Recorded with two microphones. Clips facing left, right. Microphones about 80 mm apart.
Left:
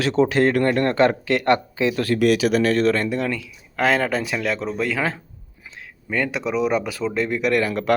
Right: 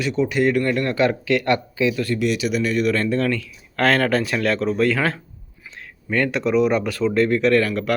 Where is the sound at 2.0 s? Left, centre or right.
Left.